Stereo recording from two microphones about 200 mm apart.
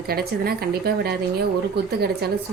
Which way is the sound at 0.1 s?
50° right (ahead or behind).